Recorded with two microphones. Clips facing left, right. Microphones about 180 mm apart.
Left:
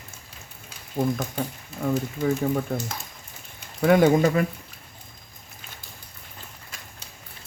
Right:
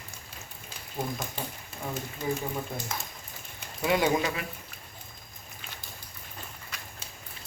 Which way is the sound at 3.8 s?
50° left (ahead or behind).